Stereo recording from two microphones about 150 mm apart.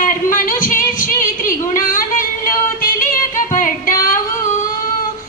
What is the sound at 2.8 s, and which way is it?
Music, 70° left (ahead or behind).